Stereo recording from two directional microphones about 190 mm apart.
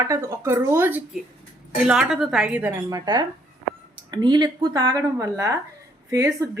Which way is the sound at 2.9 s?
20° right (ahead or behind).